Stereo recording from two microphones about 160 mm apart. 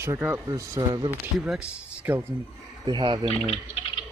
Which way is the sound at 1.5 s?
10° right (ahead or behind).